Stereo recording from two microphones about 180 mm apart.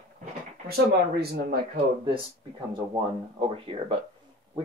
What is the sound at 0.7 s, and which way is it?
Speech, 60° right (ahead or behind).